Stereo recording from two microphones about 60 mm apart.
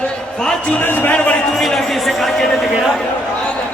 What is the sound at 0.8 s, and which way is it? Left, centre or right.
Speech, left.